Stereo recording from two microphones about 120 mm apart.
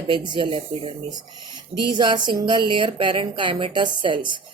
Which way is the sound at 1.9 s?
40° right (ahead or behind).